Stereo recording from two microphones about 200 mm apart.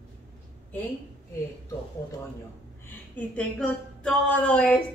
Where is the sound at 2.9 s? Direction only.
5° left (ahead or behind).